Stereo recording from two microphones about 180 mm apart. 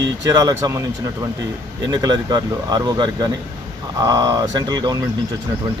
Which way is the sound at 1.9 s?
20° right (ahead or behind).